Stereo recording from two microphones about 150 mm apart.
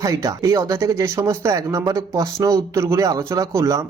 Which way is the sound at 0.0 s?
25° right (ahead or behind).